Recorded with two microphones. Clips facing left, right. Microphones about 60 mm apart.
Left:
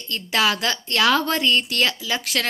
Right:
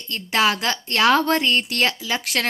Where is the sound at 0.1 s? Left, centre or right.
Right.